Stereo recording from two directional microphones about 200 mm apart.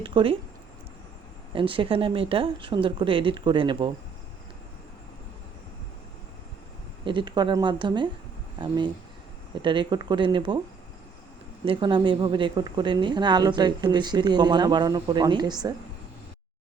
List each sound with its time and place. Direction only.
0.0 s a woman's voice: 25° right (ahead or behind)
1.5 s a woman's voice: 25° right (ahead or behind)
7.0 s a woman's voice: 25° right (ahead or behind)
11.6 s a woman's voice: 25° right (ahead or behind)